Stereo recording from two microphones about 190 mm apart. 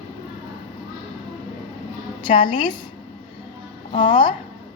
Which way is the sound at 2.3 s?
40° left (ahead or behind).